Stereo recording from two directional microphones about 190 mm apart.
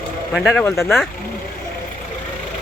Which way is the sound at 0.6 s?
15° left (ahead or behind).